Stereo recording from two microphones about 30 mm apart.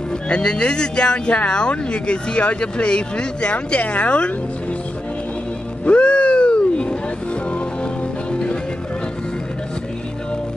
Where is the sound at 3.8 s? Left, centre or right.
Left.